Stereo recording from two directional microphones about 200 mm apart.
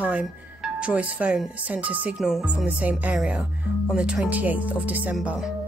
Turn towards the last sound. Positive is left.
turn(degrees=0)  # may be behind; listen again after turning